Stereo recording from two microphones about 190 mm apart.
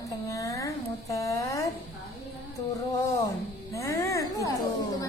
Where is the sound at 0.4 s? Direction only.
15° left (ahead or behind).